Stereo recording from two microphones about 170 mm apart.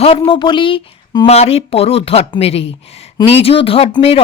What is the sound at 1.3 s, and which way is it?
Speech, 40° left (ahead or behind).